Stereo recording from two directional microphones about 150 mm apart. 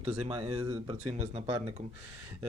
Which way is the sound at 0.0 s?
45° right (ahead or behind).